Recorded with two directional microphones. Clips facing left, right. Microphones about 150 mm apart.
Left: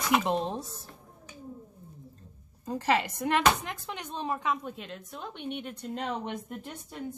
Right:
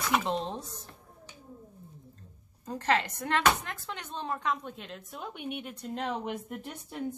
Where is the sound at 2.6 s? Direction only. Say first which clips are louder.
Left 1 dB; 10° left (ahead or behind).